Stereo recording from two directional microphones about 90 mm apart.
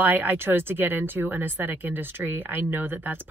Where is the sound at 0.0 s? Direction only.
20° right (ahead or behind).